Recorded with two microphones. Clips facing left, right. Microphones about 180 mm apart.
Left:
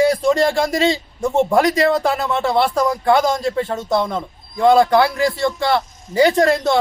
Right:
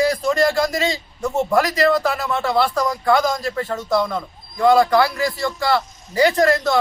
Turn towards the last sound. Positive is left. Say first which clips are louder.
# left 2 dB
turn(degrees=25)  # may be behind; listen again after turning